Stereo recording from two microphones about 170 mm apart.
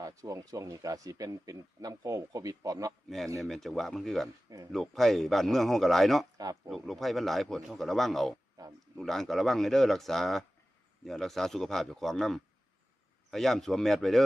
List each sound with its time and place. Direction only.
0.0 s speech: 20° right (ahead or behind)
3.4 s a man's voice: centre (ahead or behind)
4.4 s speech: 20° right (ahead or behind)
4.7 s a man's voice: centre (ahead or behind)
6.3 s speech: 20° right (ahead or behind)
6.7 s a man's voice: centre (ahead or behind)
8.6 s speech: 20° right (ahead or behind)
9.0 s a man's voice: centre (ahead or behind)